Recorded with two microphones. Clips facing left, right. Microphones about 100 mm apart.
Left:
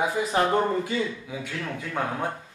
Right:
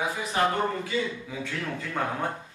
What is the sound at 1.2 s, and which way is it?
A man's voice, 5° left (ahead or behind).